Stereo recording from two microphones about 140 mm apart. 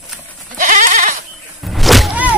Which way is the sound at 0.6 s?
65° right (ahead or behind).